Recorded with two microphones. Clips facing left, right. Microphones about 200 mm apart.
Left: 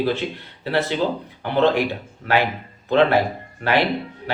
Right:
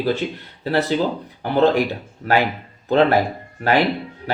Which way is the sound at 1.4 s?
40° right (ahead or behind).